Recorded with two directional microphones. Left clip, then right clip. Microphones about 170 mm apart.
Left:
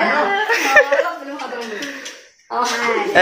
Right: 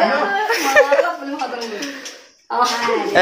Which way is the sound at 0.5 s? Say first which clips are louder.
Even; 10° right (ahead or behind).